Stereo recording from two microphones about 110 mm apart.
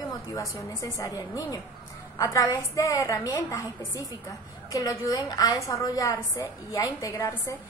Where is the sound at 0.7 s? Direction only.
30° left (ahead or behind).